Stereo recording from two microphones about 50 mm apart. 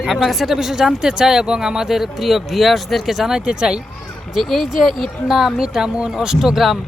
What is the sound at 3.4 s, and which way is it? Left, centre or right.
Speech, centre.